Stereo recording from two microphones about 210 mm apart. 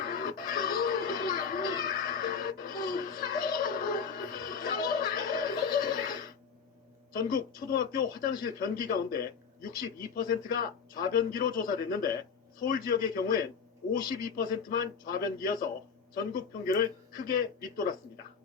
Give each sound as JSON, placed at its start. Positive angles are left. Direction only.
{"t": 0.1, "sound": "music", "side_deg": 45}
{"t": 7.1, "sound": "a sound", "side_deg": 40}
{"t": 7.7, "sound": "a man's voice", "side_deg": 40}